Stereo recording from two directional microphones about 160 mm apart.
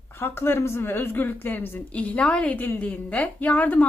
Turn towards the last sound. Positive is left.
turn(degrees=10)  # may be behind; listen again after turning